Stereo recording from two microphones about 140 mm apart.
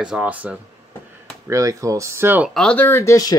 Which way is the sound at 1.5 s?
20° right (ahead or behind).